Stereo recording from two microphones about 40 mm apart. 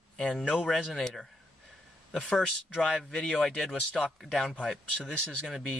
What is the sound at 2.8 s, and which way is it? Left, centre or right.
Speech, left.